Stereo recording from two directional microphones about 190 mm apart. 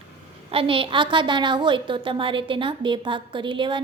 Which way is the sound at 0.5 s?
30° right (ahead or behind).